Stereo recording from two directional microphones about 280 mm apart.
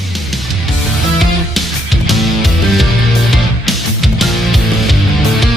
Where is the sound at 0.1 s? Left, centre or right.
Centre.